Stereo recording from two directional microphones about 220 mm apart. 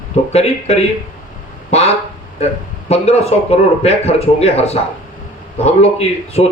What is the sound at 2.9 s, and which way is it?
A man's voice, 30° left (ahead or behind).